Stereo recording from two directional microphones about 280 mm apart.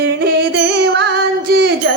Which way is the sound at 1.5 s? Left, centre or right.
Right.